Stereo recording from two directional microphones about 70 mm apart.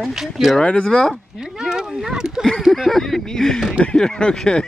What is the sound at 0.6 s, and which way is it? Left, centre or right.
Speech, centre.